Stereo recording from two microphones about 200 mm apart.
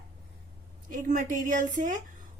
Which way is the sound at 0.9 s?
40° right (ahead or behind).